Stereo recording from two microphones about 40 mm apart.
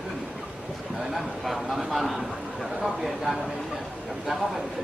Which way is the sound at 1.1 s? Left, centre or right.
Centre.